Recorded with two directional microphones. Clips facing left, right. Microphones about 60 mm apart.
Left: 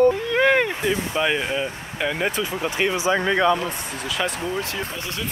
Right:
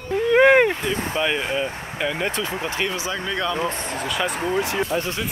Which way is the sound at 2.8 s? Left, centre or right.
Left.